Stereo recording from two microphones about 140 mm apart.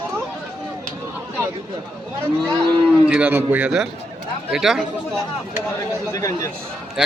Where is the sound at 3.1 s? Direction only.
10° right (ahead or behind).